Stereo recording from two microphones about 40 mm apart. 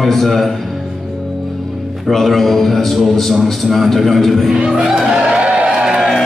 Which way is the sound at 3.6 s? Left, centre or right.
Centre.